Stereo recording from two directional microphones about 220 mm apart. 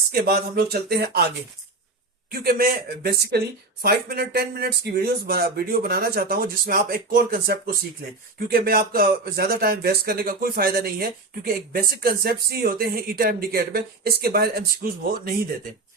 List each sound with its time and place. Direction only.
0.1 s speech: 45° right (ahead or behind)
2.3 s speech: 45° right (ahead or behind)